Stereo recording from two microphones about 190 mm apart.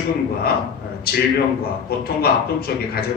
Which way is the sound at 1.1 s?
55° left (ahead or behind).